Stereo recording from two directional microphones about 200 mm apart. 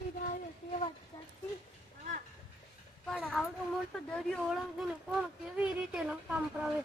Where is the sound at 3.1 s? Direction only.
Centre (ahead or behind).